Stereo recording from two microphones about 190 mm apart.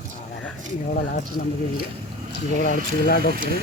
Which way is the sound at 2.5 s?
50° left (ahead or behind).